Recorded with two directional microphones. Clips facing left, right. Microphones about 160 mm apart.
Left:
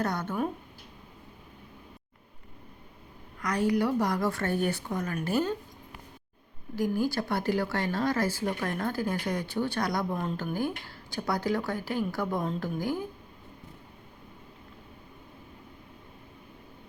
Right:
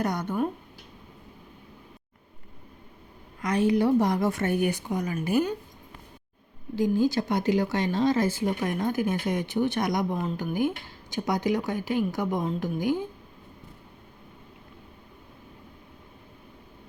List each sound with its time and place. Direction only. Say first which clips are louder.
0.0 s speech: right 2 dB; 15° right (ahead or behind)
3.4 s speech: right 4 dB; 25° right (ahead or behind)
6.7 s speech: right 4 dB; 20° right (ahead or behind)